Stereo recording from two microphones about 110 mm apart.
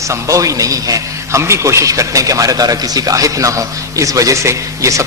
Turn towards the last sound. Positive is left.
turn(degrees=-30)  # may be behind; listen again after turning